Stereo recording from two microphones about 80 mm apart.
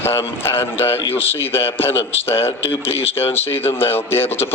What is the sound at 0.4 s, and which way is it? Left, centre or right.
A man's voice, left.